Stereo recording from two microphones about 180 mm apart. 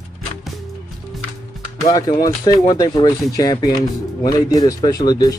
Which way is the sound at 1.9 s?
20° left (ahead or behind).